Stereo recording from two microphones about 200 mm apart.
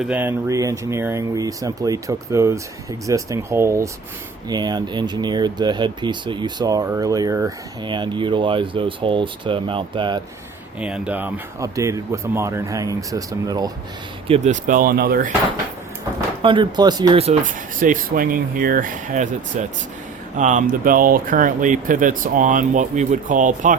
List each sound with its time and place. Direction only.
0.0 s speech: 5° right (ahead or behind); by 10.2 s 25° right (ahead or behind)
10.8 s speech: 5° right (ahead or behind)
14.3 s speech: 35° right (ahead or behind); by 15.3 s 50° right (ahead or behind)
16.4 s speech: 25° right (ahead or behind)
17.2 s speech: 40° right (ahead or behind)